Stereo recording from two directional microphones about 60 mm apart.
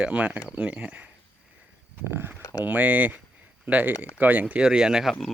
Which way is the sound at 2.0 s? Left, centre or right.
Right.